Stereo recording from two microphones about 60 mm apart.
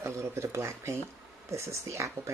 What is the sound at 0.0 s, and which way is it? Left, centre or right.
Speech, right.